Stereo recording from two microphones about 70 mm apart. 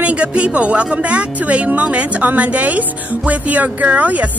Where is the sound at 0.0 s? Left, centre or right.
Centre.